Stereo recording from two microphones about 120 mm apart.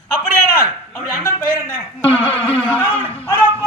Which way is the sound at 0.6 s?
20° left (ahead or behind).